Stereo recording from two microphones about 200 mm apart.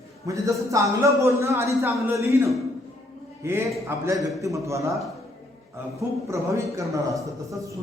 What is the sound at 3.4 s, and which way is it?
A man's voice, 15° right (ahead or behind).